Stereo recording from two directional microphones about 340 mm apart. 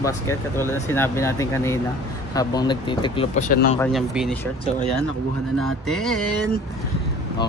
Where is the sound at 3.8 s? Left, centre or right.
Centre.